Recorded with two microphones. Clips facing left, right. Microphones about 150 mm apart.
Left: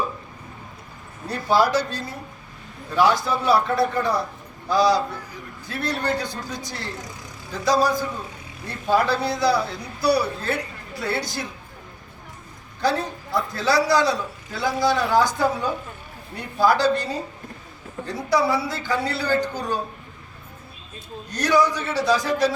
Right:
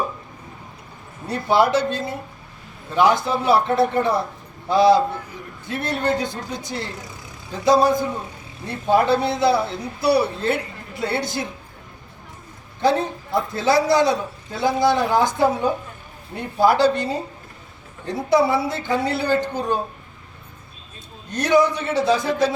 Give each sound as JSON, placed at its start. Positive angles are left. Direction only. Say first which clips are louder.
{"t": 1.3, "sound": "a man's voice", "louder": "right 2 dB", "side_deg": -20}
{"t": 12.8, "sound": "a man's voice", "louder": "right 4 dB", "side_deg": -20}
{"t": 21.2, "sound": "a man's voice", "louder": "right 3 dB", "side_deg": -25}